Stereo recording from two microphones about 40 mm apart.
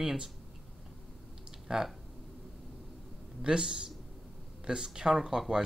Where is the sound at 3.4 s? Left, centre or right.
Centre.